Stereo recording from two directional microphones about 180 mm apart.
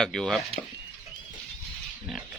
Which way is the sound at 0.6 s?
45° left (ahead or behind).